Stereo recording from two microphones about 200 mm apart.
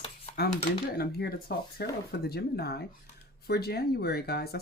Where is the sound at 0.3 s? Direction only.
50° left (ahead or behind).